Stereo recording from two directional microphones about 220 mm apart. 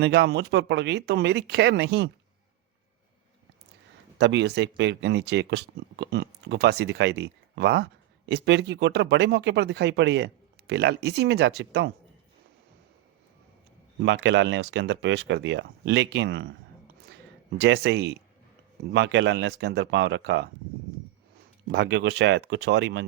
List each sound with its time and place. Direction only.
0.0 s speech: 50° right (ahead or behind)
4.2 s speech: 50° right (ahead or behind)
14.0 s speech: 55° right (ahead or behind)
17.6 s speech: 50° right (ahead or behind)
21.7 s speech: 50° right (ahead or behind)